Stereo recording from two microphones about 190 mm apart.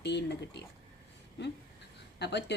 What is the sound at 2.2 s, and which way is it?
Speech, 65° left (ahead or behind).